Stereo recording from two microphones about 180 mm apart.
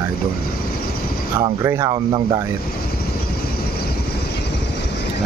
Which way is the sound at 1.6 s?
15° right (ahead or behind).